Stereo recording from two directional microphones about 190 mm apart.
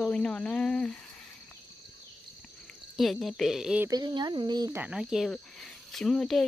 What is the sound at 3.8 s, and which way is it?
Speech, 20° right (ahead or behind).